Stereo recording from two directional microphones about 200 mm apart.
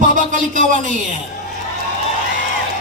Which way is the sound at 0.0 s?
40° right (ahead or behind).